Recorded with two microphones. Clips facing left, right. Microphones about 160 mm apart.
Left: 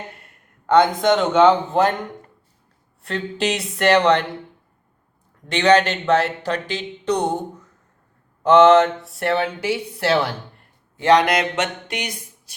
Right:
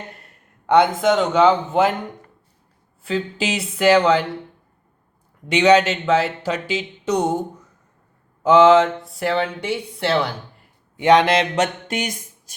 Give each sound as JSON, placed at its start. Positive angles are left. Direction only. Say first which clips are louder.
{"t": 0.7, "sound": "speech", "louder": "even", "side_deg": -5}
{"t": 3.0, "sound": "speech", "louder": "even", "side_deg": 0}
{"t": 5.5, "sound": "speech", "louder": "right 1 dB", "side_deg": -10}
{"t": 8.4, "sound": "speech", "louder": "even", "side_deg": 0}
{"t": 10.9, "sound": "a sound", "louder": "right 1 dB", "side_deg": -20}